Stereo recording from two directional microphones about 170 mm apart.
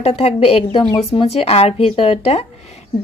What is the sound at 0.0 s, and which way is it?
A woman's voice, 35° left (ahead or behind).